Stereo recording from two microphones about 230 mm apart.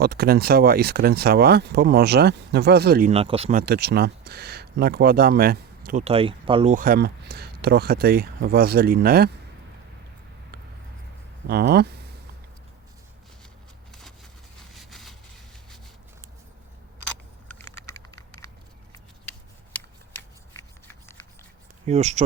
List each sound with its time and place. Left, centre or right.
0.0 s speech: right
3.1 s speech: right
3.6 s speech: right
11.4 s speech: right
14.7 s vehicle: centre
17.6 s typing: centre
21.8 s speech: right